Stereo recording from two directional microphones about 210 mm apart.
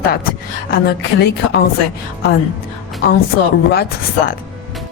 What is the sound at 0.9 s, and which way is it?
Speech, 50° left (ahead or behind).